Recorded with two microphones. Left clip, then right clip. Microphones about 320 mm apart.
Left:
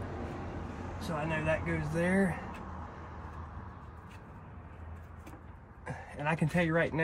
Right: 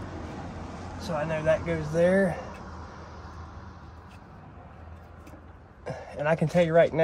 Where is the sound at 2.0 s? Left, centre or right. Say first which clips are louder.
Right 9 dB; right.